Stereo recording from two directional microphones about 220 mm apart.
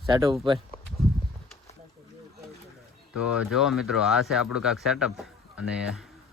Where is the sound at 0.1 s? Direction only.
15° right (ahead or behind).